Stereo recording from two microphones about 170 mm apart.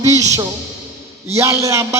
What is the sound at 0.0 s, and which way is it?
A man's voice, 20° right (ahead or behind).